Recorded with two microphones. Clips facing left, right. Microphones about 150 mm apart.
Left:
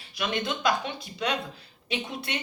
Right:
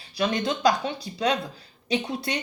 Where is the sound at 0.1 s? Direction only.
35° right (ahead or behind).